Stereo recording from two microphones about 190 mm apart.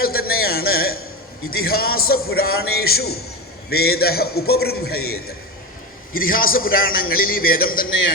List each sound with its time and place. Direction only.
0.0 s a sound: 50° left (ahead or behind)
1.5 s a man's voice: 50° left (ahead or behind)
6.1 s a man's voice: 50° left (ahead or behind)
7.9 s a man's voice: 85° left